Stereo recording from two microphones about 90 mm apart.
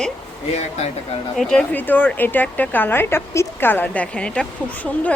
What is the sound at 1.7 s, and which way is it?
A woman's voice, 20° left (ahead or behind).